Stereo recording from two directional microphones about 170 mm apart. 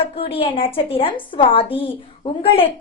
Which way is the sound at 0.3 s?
35° left (ahead or behind).